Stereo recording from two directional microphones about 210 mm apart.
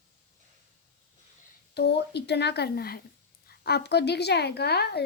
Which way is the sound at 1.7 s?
50° left (ahead or behind).